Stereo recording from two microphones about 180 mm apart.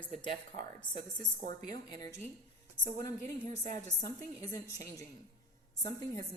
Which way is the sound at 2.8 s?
45° right (ahead or behind).